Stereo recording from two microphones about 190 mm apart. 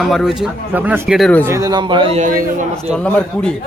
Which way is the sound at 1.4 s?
15° right (ahead or behind).